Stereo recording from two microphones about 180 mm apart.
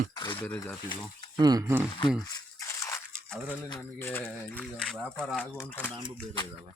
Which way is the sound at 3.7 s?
15° left (ahead or behind).